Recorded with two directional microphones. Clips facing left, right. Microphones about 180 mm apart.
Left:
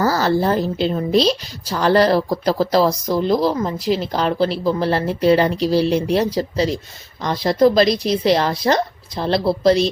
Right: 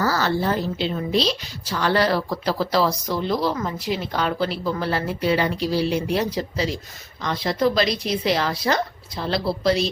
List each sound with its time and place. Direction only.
0.0 s a woman's voice: 40° left (ahead or behind)